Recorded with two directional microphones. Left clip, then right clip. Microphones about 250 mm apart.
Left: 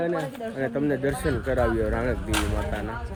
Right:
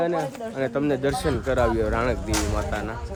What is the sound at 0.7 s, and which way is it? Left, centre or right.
Speech, centre.